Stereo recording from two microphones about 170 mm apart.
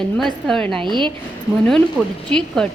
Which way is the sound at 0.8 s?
25° right (ahead or behind).